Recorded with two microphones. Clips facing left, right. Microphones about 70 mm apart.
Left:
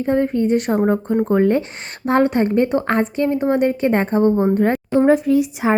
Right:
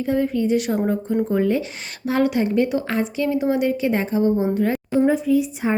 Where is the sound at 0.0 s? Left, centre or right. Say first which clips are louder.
Left 3 dB; left.